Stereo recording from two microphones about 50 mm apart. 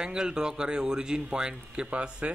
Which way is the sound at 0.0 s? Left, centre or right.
Centre.